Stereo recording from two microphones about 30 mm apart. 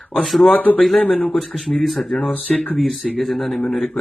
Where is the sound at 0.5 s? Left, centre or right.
Left.